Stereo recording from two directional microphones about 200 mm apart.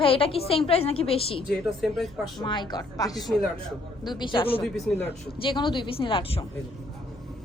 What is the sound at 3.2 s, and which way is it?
Speech, centre (ahead or behind).